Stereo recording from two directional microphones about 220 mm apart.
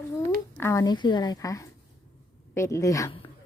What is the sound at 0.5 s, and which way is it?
Speech, 10° left (ahead or behind).